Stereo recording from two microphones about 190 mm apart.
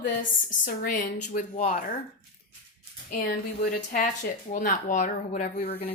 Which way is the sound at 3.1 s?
45° left (ahead or behind).